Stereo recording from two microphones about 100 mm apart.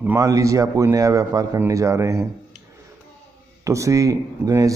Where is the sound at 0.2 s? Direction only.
35° right (ahead or behind).